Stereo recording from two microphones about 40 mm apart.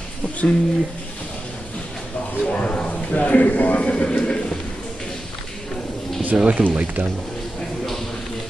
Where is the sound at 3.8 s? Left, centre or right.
Left.